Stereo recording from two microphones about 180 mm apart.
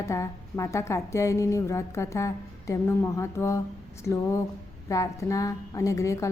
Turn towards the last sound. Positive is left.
turn(degrees=15)  # may be behind; listen again after turning